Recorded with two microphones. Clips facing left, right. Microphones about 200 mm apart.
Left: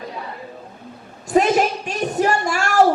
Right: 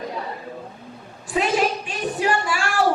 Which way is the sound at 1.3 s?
45° left (ahead or behind).